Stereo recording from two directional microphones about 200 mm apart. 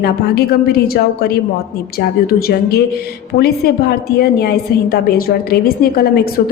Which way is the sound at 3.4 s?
50° left (ahead or behind).